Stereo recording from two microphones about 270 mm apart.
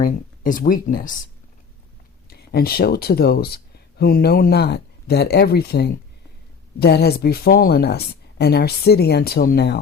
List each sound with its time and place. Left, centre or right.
0.0 s speech: left
2.3 s speech: left